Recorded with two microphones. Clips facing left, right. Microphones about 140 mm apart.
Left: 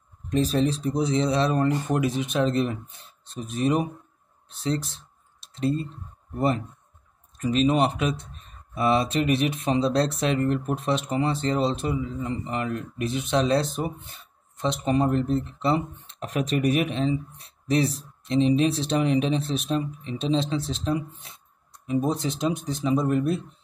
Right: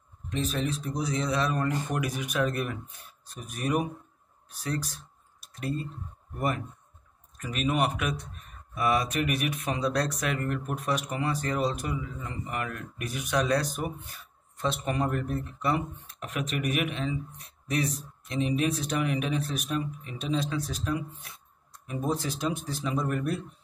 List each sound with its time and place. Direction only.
0.3 s speech: 35° left (ahead or behind)
4.5 s a sound: 25° left (ahead or behind)
6.3 s speech: 25° left (ahead or behind)